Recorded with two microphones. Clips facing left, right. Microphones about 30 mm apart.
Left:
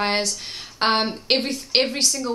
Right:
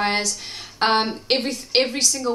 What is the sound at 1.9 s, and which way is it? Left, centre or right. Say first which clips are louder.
Speech: even; left.